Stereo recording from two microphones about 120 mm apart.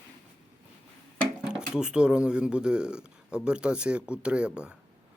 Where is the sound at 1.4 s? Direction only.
5° right (ahead or behind).